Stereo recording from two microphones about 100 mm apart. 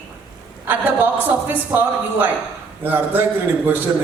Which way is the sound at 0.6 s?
20° right (ahead or behind).